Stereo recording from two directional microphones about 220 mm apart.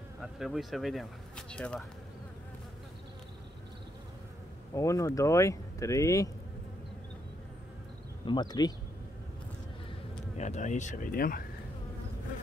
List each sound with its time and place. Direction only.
0.2 s speech: centre (ahead or behind)
4.7 s speech: 15° left (ahead or behind)
8.3 s speech: 20° left (ahead or behind)
10.3 s speech: 30° left (ahead or behind)